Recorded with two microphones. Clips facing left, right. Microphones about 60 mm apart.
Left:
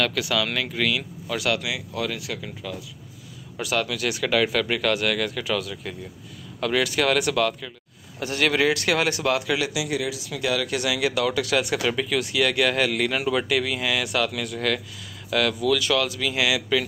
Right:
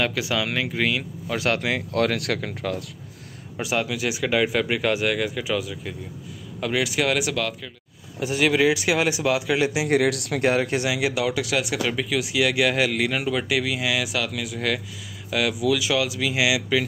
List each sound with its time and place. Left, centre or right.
0.0 s speech: centre
1.3 s speech: right
2.0 s speech: right
3.5 s speech: right
9.8 s speech: right
10.4 s speech: right; by 16.8 s centre